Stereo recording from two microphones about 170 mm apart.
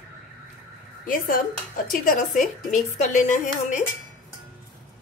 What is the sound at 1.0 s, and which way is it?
A woman's voice, 55° left (ahead or behind).